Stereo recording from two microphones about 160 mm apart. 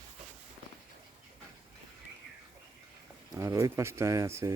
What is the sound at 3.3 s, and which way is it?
Speech, 20° right (ahead or behind).